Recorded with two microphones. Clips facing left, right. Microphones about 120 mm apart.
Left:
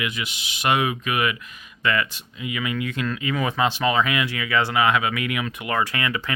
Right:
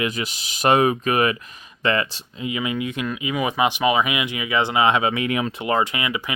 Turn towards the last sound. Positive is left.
turn(degrees=-15)  # may be behind; listen again after turning